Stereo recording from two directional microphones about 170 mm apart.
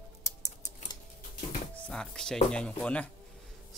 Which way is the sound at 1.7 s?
5° left (ahead or behind).